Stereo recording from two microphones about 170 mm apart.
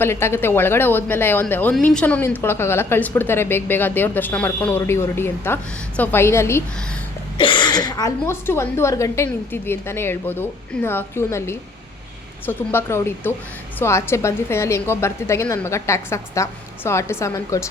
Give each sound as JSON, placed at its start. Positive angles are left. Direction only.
{"t": 0.0, "sound": "a woman's voice", "side_deg": 15}
{"t": 7.3, "sound": "a woman's voice", "side_deg": 30}